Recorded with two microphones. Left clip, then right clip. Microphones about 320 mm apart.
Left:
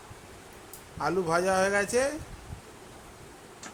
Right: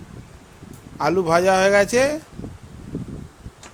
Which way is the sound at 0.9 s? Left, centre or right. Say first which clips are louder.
Right 9 dB; right.